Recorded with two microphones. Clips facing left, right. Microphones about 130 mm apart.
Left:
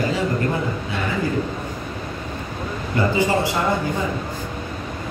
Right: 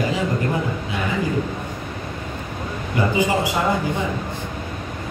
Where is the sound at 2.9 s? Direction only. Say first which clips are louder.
Even; 15° right (ahead or behind).